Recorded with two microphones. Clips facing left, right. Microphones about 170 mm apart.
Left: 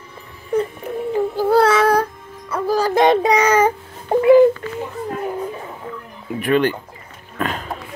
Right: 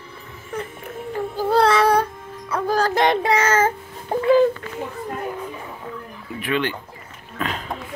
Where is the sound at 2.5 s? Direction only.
5° left (ahead or behind).